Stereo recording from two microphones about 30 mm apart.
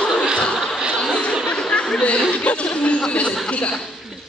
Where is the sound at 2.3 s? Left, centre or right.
Left.